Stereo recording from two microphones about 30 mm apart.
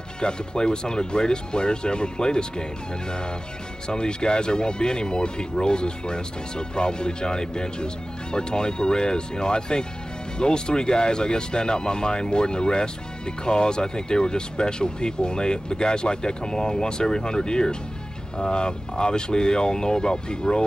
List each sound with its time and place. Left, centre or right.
0.2 s speech: left
3.8 s speech: left